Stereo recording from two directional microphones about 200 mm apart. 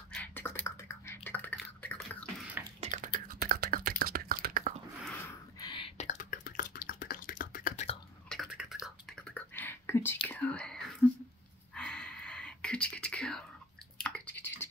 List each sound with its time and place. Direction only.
0.1 s typing: 10° left (ahead or behind)
1.8 s beatboxing: 5° left (ahead or behind)
2.8 s computer keyboard: 40° right (ahead or behind)
5.6 s whispering: 25° left (ahead or behind)
8.3 s whispering: centre (ahead or behind)
10.2 s speech: 10° left (ahead or behind)
11.7 s whispering: 5° left (ahead or behind)
13.9 s a sound: 5° left (ahead or behind)